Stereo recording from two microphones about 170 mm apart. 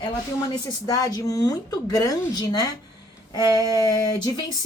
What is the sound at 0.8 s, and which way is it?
Speech, 20° left (ahead or behind).